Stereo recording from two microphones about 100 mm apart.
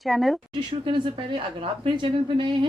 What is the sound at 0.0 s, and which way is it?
Speech, centre (ahead or behind).